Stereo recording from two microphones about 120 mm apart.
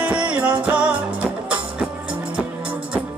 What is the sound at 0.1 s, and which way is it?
Music, 10° right (ahead or behind).